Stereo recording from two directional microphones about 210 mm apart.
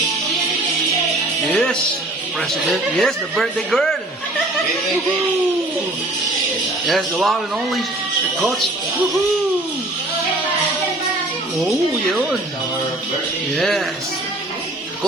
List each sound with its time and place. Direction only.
1.5 s music: centre (ahead or behind)
2.6 s speech: centre (ahead or behind)
6.8 s speech: centre (ahead or behind)
13.6 s speech: centre (ahead or behind)